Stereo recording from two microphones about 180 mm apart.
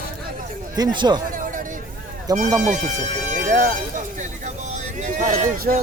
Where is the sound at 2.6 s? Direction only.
45° right (ahead or behind).